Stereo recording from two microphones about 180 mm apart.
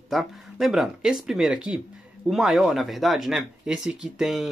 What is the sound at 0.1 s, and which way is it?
Speech, centre (ahead or behind).